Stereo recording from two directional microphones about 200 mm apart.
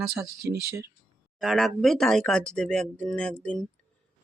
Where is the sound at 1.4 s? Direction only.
Centre (ahead or behind).